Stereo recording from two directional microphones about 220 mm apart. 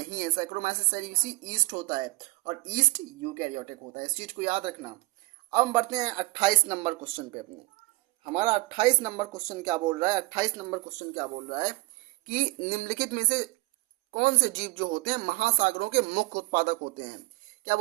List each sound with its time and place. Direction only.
0.0 s a woman's voice: 35° right (ahead or behind)